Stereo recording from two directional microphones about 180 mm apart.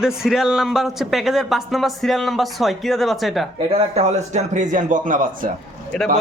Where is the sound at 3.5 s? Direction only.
35° right (ahead or behind).